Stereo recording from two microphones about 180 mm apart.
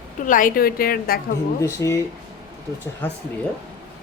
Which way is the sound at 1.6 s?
15° left (ahead or behind).